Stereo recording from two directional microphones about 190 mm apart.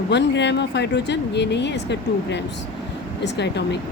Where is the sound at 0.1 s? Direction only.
65° left (ahead or behind).